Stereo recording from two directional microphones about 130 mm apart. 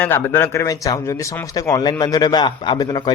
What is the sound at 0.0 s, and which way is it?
A man's voice, 15° left (ahead or behind).